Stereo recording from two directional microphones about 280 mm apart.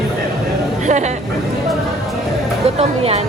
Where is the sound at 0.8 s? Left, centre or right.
Right.